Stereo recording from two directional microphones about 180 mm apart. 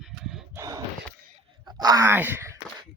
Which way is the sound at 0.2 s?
5° right (ahead or behind).